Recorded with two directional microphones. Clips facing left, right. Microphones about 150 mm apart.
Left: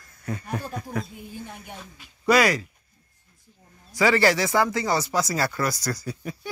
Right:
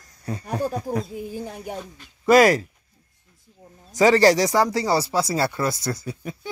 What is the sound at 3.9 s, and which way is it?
Speech, 40° right (ahead or behind).